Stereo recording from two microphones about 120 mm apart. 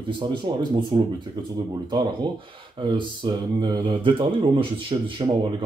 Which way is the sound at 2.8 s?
40° right (ahead or behind).